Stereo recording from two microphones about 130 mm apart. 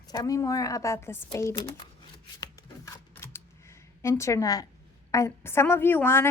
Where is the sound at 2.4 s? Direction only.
25° left (ahead or behind).